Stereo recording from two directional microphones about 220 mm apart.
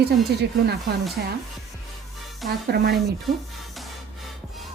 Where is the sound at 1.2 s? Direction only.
45° right (ahead or behind).